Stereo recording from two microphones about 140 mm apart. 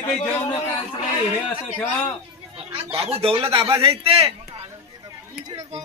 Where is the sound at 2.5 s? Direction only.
45° right (ahead or behind).